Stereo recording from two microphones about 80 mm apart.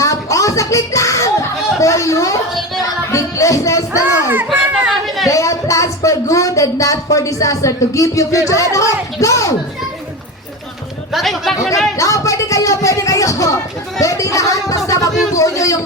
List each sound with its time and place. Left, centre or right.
0.0 s a sound: left
3.1 s music: left
4.6 s chatter: right
4.9 s chatter: centre
5.3 s speech: left
11.1 s speech: centre
11.9 s speech: left